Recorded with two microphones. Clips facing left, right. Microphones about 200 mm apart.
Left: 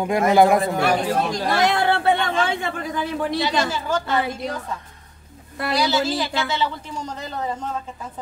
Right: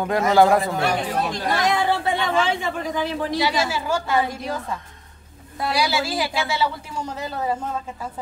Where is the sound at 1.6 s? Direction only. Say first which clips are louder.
Left 2 dB; 70° left (ahead or behind).